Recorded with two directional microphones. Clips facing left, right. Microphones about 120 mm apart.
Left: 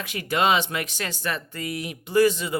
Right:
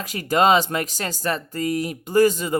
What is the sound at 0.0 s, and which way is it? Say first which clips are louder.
A man's voice: right 5 dB; 40° right (ahead or behind).